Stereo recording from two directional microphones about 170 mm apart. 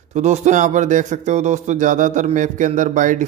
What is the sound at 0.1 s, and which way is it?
A man's voice, 45° right (ahead or behind).